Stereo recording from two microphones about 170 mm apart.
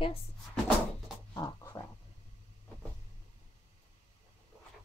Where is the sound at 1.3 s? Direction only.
20° left (ahead or behind).